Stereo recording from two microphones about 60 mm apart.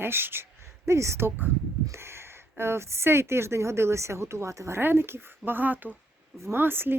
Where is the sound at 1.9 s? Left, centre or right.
Right.